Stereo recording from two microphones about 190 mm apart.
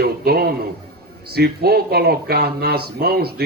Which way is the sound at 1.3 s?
55° right (ahead or behind).